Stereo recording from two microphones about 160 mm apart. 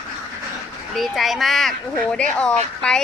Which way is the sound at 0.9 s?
Centre (ahead or behind).